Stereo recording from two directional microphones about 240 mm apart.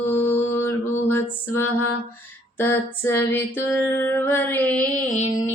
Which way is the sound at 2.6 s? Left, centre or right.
Centre.